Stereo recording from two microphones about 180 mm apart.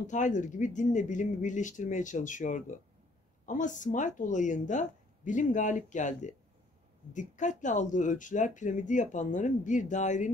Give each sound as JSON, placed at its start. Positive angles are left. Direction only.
{"t": 0.0, "sound": "speech", "side_deg": 45}